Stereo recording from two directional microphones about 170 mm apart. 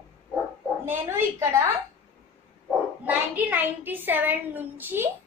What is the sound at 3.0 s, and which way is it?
A woman's voice, 10° right (ahead or behind).